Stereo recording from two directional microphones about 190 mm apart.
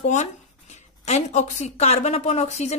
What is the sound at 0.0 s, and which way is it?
Speech, 40° left (ahead or behind).